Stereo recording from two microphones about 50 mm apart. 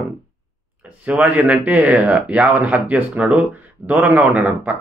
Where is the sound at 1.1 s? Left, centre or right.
Right.